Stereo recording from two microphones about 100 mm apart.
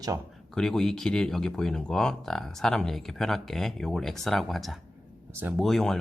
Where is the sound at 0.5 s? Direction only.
5° left (ahead or behind).